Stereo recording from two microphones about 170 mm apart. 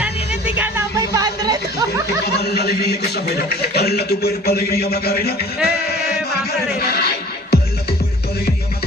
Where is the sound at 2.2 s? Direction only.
70° left (ahead or behind).